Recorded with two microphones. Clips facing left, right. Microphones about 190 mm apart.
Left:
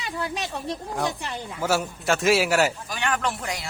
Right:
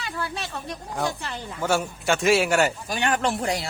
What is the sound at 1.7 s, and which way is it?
A man's voice, centre (ahead or behind).